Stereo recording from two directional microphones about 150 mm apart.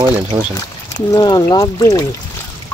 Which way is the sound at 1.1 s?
25° left (ahead or behind).